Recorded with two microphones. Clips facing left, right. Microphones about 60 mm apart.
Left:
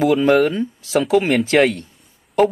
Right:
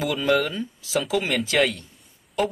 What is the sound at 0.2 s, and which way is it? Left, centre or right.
Speech, left.